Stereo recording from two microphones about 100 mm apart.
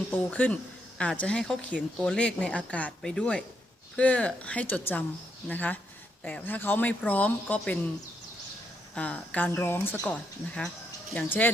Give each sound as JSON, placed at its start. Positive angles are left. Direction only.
{"t": 0.2, "sound": "speech", "side_deg": 15}
{"t": 9.0, "sound": "speech", "side_deg": 15}
{"t": 9.5, "sound": "speech", "side_deg": 25}